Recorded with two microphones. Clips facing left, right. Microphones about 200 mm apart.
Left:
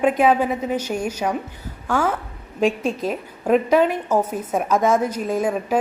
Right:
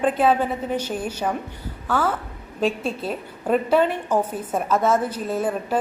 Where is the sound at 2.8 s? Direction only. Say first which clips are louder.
Left 3 dB; 40° left (ahead or behind).